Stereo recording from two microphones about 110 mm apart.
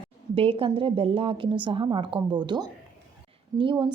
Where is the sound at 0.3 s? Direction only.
55° right (ahead or behind).